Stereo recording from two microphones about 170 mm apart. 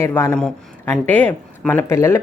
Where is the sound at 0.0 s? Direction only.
15° left (ahead or behind).